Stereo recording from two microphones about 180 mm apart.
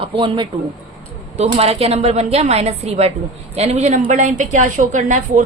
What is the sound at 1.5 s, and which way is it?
A woman's voice, 35° right (ahead or behind).